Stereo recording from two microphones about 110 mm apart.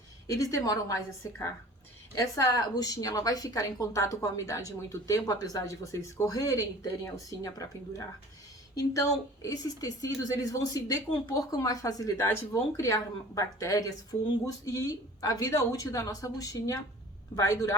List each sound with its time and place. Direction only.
0.3 s a woman's voice: 30° left (ahead or behind)